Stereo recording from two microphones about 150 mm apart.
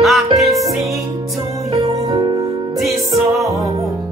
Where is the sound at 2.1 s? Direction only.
25° right (ahead or behind).